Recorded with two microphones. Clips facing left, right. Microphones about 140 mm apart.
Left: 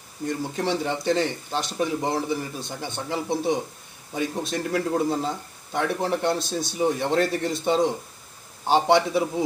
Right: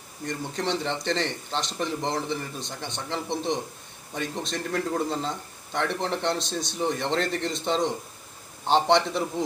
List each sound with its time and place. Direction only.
0.3 s speech: 5° left (ahead or behind)